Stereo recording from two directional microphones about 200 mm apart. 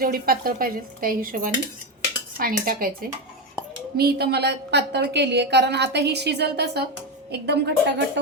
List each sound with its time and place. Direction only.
0.0 s speech: 45° right (ahead or behind)
3.9 s a woman's voice: 55° right (ahead or behind)